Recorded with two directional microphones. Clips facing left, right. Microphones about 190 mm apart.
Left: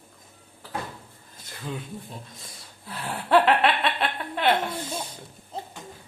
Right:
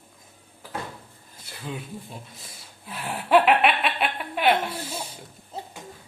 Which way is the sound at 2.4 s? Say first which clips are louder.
Even; 10° right (ahead or behind).